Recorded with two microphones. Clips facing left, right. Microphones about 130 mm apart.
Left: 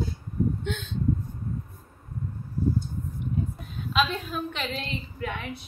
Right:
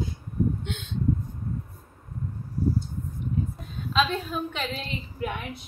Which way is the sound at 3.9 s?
Centre (ahead or behind).